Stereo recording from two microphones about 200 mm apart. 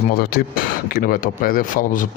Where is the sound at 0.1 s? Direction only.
50° left (ahead or behind).